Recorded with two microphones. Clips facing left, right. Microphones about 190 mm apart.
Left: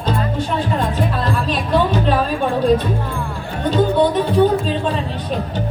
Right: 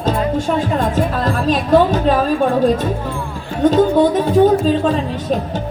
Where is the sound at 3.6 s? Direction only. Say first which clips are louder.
Right 4 dB; 45° right (ahead or behind).